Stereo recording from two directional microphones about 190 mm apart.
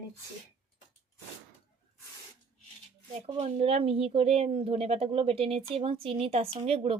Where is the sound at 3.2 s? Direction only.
35° right (ahead or behind).